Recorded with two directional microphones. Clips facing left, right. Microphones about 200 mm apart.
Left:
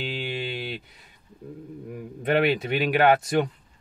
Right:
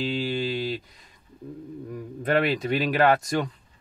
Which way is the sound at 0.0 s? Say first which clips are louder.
Right 4 dB; 5° left (ahead or behind).